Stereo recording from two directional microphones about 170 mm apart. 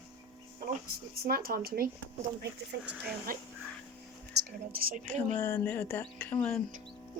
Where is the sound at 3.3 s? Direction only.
55° right (ahead or behind).